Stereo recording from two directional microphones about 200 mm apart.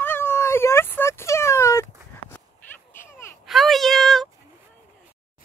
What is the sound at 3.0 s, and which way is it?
Baby cry, 10° left (ahead or behind).